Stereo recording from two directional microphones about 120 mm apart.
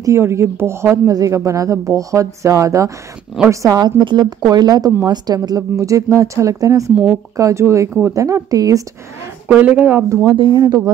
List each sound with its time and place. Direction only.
0.0 s speech: 25° right (ahead or behind)
9.5 s speech: 10° right (ahead or behind)
10.2 s speech: 45° right (ahead or behind)
10.5 s speech: 30° right (ahead or behind)